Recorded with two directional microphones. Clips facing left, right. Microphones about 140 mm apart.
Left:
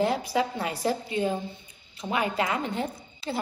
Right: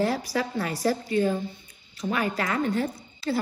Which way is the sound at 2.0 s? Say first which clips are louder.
Even; 20° left (ahead or behind).